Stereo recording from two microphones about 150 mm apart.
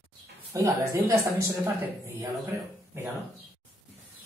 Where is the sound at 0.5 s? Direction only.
20° right (ahead or behind).